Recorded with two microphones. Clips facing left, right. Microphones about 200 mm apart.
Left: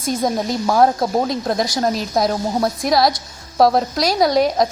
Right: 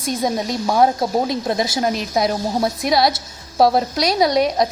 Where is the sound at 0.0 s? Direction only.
Centre (ahead or behind).